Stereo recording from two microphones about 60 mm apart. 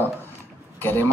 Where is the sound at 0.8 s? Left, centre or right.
Left.